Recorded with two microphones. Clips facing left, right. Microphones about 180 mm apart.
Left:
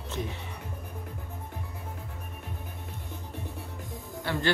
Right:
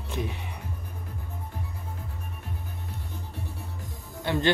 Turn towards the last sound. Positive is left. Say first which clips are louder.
# right 4 dB
turn(degrees=-20)  # may be behind; listen again after turning